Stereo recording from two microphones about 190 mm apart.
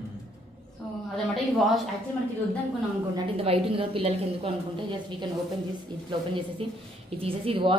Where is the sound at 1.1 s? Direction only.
Centre (ahead or behind).